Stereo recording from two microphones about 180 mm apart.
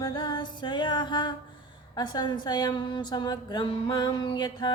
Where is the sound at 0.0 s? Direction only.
25° left (ahead or behind).